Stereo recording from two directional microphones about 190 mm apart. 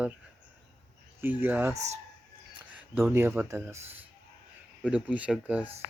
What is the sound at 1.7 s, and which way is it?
Speech, 35° right (ahead or behind).